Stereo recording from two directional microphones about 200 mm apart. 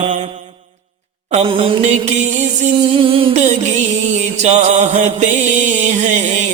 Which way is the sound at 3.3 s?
35° right (ahead or behind).